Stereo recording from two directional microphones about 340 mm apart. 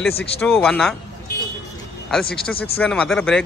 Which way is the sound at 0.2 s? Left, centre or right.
Centre.